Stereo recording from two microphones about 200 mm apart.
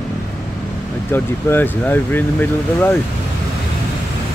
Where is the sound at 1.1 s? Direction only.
10° left (ahead or behind).